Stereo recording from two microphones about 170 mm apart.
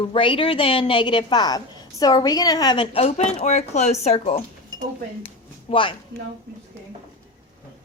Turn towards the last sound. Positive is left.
turn(degrees=30)  # may be behind; listen again after turning